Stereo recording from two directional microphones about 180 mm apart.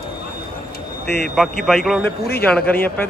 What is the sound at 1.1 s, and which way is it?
Speech, 65° left (ahead or behind).